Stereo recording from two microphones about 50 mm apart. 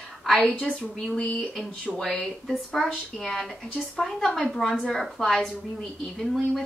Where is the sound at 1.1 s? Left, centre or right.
Left.